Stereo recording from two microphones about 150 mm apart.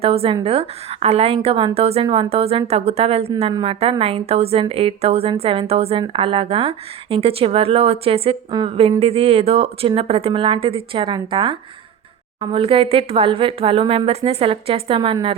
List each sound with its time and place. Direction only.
0.0 s a woman's voice: 40° right (ahead or behind)